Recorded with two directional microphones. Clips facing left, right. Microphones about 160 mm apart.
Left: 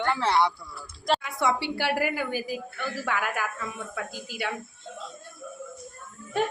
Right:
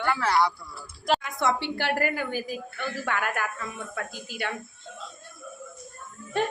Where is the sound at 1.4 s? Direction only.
10° left (ahead or behind).